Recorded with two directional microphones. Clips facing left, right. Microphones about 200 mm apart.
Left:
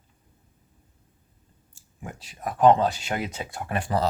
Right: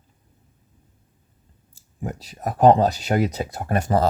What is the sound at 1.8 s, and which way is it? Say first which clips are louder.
Speech: right 8 dB; 40° right (ahead or behind).